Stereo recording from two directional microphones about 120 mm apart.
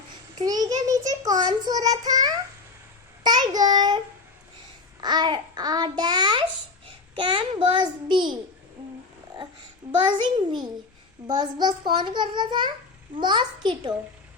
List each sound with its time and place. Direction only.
0.3 s child singing: 30° right (ahead or behind)
3.2 s child singing: 35° right (ahead or behind)
4.9 s a child's voice: 35° right (ahead or behind)
10.1 s a child's voice: 40° right (ahead or behind)